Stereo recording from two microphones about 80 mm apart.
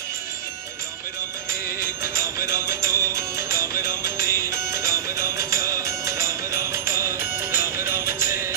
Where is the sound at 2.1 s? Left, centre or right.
Right.